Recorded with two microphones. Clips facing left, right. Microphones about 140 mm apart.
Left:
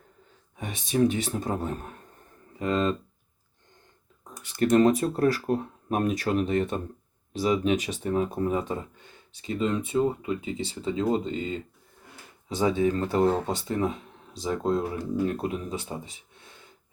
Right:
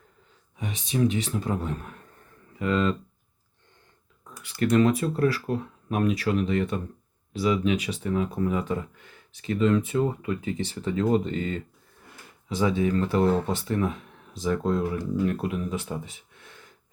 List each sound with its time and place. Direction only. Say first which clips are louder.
0.5 s speech: left 2 dB; 45° left (ahead or behind)
4.6 s speech: left 1 dB; 40° left (ahead or behind); by 11.6 s 25° left (ahead or behind)
12.5 s speech: even; 35° left (ahead or behind)